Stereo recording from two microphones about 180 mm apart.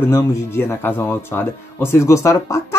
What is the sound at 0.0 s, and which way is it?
Speech, 15° left (ahead or behind).